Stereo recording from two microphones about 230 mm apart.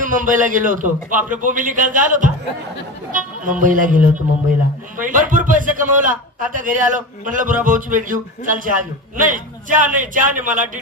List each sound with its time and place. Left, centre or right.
0.0 s a man's voice: right
4.9 s a man's voice: right